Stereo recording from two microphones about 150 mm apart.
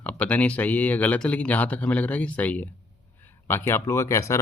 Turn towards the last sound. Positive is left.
turn(degrees=20)  # may be behind; listen again after turning